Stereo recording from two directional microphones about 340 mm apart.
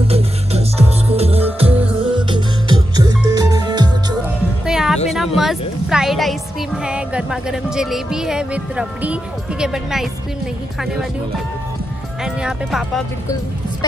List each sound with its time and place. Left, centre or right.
0.0 s music: centre
4.6 s music: centre
5.1 s a sound: centre
6.8 s speech: centre
12.4 s speech: centre